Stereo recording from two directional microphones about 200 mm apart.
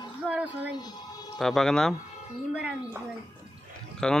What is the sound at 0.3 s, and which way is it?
Speech, 5° right (ahead or behind).